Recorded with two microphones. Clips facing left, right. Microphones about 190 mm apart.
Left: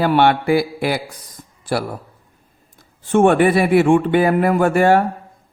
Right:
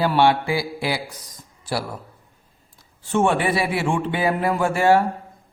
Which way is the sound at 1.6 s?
55° left (ahead or behind).